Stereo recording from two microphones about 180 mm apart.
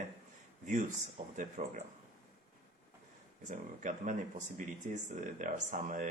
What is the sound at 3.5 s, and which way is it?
Speech, 45° right (ahead or behind).